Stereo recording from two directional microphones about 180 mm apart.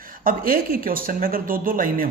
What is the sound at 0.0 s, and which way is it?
Speech, 50° right (ahead or behind).